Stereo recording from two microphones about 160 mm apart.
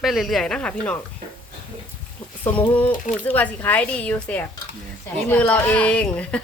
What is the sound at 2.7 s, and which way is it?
Speech, 10° left (ahead or behind).